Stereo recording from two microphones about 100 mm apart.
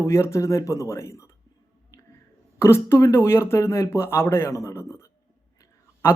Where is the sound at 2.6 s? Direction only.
25° left (ahead or behind).